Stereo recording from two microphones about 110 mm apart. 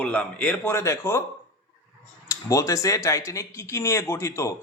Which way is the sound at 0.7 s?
25° left (ahead or behind).